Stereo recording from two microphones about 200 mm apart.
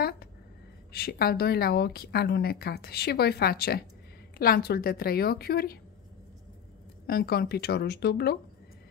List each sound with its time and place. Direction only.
0.9 s a woman's voice: 50° left (ahead or behind)
7.1 s a woman's voice: 50° left (ahead or behind)